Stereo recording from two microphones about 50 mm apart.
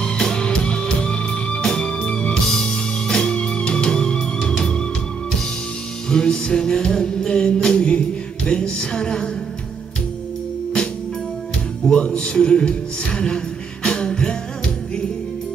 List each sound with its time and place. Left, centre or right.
0.0 s music: centre
6.0 s music: centre
8.5 s speech: centre
11.8 s speech: centre
13.8 s music: centre